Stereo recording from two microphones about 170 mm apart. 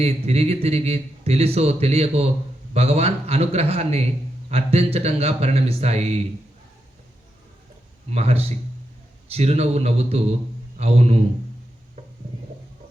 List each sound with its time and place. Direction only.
0.0 s a man's voice: 40° right (ahead or behind)
8.1 s a man's voice: 40° right (ahead or behind)